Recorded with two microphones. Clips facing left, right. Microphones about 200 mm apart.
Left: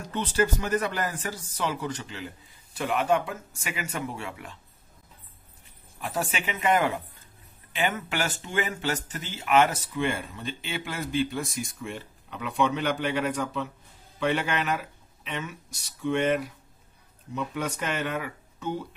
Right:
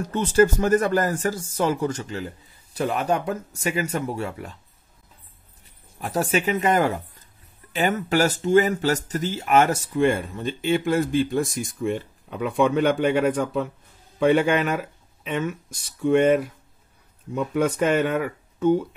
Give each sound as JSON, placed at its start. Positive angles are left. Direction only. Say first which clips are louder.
{"t": 0.0, "sound": "a man's voice", "louder": "right 8 dB", "side_deg": -45}
{"t": 5.9, "sound": "a man's voice", "louder": "right 7 dB", "side_deg": -40}